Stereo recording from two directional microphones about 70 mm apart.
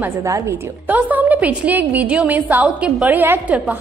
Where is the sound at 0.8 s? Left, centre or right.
Right.